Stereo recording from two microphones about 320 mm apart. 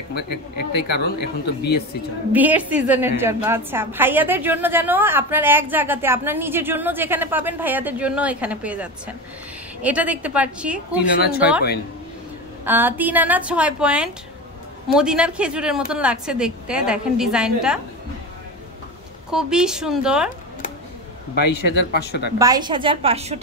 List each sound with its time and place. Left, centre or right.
0.6 s speech: left
2.3 s a woman's voice: centre
11.1 s speech: left
12.6 s a woman's voice: centre
19.3 s a woman's voice: centre
21.5 s speech: left
22.4 s a woman's voice: centre